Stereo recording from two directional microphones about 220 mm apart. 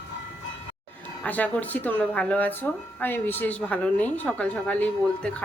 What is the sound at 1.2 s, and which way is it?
Speech, 5° left (ahead or behind).